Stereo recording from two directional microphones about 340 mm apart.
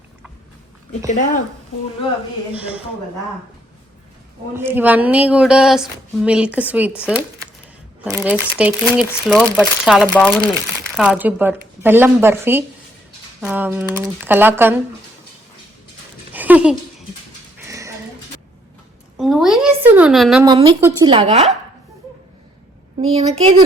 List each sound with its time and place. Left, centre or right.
2.6 s speech: centre
4.5 s speech: centre
8.1 s speech: centre
16.3 s a sound: centre
19.1 s speech: centre
20.4 s speech: centre
23.0 s speech: centre